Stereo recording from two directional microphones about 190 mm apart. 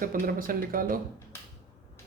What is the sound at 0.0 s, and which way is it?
Speech, 45° right (ahead or behind).